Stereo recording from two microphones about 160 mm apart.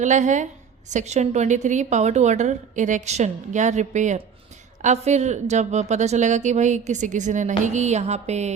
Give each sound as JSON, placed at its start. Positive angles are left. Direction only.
{"t": 0.0, "sound": "a woman's voice", "side_deg": -50}